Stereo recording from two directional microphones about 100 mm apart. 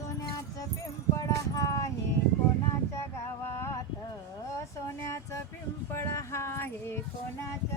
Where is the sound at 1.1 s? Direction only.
35° left (ahead or behind).